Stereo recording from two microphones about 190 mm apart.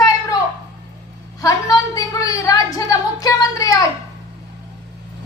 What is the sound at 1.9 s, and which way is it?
A woman's voice, 20° left (ahead or behind).